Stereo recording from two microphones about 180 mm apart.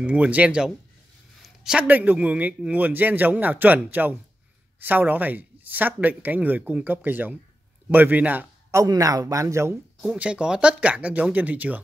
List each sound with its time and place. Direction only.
0.0 s a man's voice: 10° right (ahead or behind)